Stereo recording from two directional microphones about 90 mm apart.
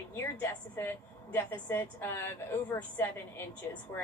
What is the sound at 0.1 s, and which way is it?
A woman's voice, 25° left (ahead or behind).